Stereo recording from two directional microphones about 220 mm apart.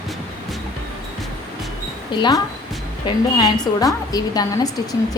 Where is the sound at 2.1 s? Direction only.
20° left (ahead or behind).